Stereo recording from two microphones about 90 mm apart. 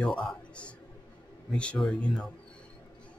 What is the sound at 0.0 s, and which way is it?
A man's voice, 10° left (ahead or behind).